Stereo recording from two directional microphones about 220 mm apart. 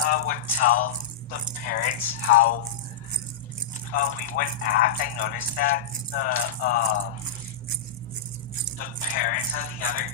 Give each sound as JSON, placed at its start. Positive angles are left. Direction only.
{"t": 0.0, "sound": "speech", "side_deg": 40}
{"t": 3.9, "sound": "speech", "side_deg": 40}
{"t": 8.8, "sound": "speech", "side_deg": 40}